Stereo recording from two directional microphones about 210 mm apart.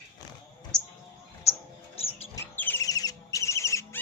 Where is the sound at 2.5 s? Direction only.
10° left (ahead or behind).